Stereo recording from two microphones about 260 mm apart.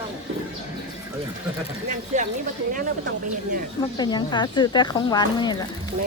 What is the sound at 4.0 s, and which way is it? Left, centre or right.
Speech, centre.